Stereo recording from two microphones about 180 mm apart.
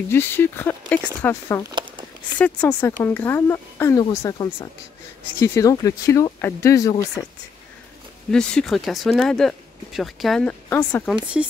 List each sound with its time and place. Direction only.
0.1 s speech: 10° left (ahead or behind)
1.7 s a sound: 25° right (ahead or behind)
2.3 s speech: 10° left (ahead or behind)
8.3 s speech: 5° left (ahead or behind)
10.7 s speech: 15° left (ahead or behind)